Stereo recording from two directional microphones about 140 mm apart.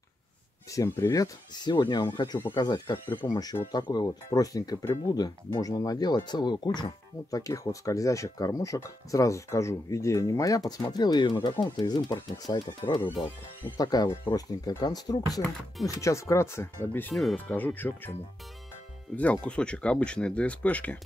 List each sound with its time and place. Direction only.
0.7 s speech: 20° left (ahead or behind)
17.1 s speech: centre (ahead or behind)
17.5 s speech: 15° left (ahead or behind)
19.3 s speech: 5° left (ahead or behind)